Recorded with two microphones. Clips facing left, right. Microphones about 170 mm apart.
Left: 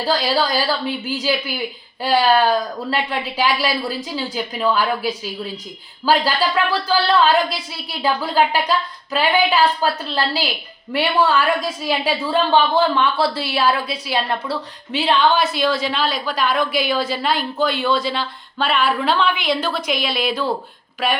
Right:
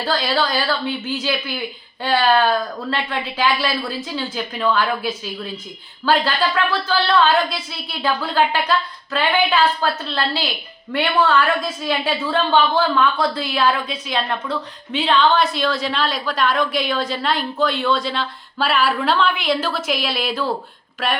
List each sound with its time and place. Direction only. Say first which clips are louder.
0.0 s speech: left 1 dB; 10° left (ahead or behind)
12.9 s speech: even; 30° left (ahead or behind)
13.2 s a woman's voice: even; 5° left (ahead or behind)